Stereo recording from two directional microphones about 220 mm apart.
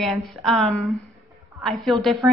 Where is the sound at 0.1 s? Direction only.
Centre (ahead or behind).